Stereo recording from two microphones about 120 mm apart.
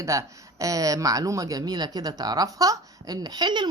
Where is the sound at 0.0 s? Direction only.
25° right (ahead or behind).